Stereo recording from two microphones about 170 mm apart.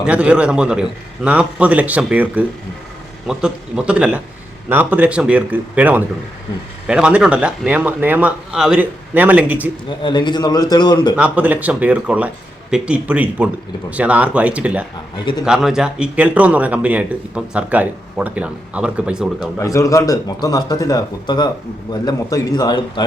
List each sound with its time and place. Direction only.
0.0 s a man's voice: 5° right (ahead or behind)
10.0 s speech: 25° left (ahead or behind)
11.2 s a man's voice: 10° right (ahead or behind)
15.2 s speech: 25° left (ahead or behind)
15.4 s a man's voice: 5° right (ahead or behind)
19.5 s speech: 20° left (ahead or behind)